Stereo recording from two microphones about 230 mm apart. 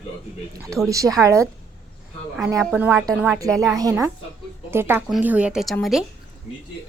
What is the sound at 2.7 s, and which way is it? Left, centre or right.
A woman's voice, centre.